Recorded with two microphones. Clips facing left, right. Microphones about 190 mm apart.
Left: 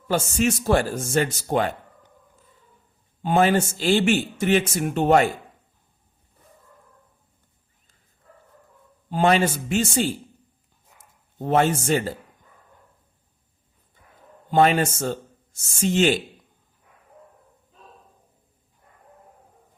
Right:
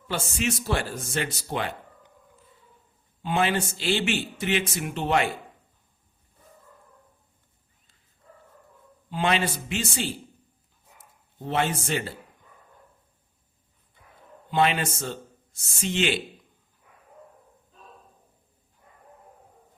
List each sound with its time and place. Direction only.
0.1 s a man's voice: 45° left (ahead or behind)
3.2 s a man's voice: 45° left (ahead or behind)
9.0 s a man's voice: 45° left (ahead or behind)
11.3 s a man's voice: 50° left (ahead or behind)
14.5 s speech: 45° left (ahead or behind)